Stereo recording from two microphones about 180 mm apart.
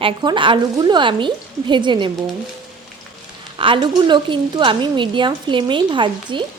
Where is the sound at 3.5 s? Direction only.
30° right (ahead or behind).